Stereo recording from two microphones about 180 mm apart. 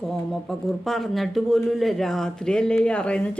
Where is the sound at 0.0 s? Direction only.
Centre (ahead or behind).